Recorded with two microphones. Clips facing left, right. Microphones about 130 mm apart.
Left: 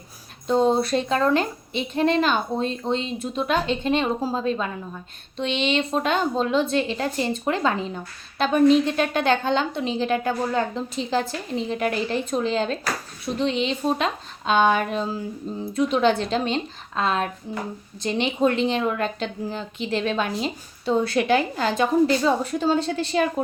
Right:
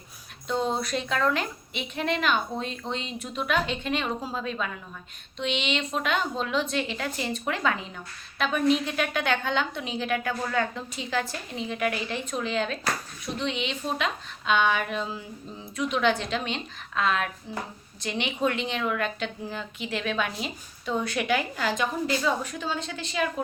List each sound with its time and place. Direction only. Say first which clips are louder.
0.4 s a woman's voice: left 8 dB; 35° left (ahead or behind)